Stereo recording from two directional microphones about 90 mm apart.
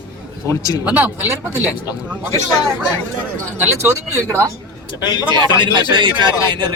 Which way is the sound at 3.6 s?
30° right (ahead or behind).